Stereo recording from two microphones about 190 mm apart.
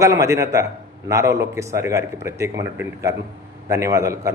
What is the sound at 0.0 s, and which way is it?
A man's voice, 15° right (ahead or behind).